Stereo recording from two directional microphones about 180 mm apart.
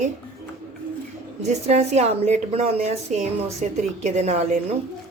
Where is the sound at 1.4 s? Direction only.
40° right (ahead or behind).